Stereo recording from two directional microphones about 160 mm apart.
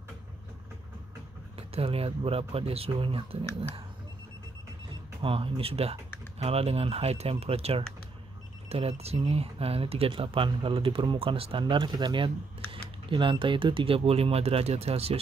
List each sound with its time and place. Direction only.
1.6 s speech: 40° right (ahead or behind)
5.2 s speech: 35° right (ahead or behind)